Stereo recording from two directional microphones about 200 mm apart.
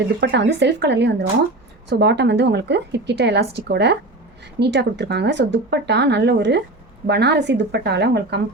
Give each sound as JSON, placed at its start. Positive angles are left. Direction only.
{"t": 0.2, "sound": "a woman's voice", "side_deg": -60}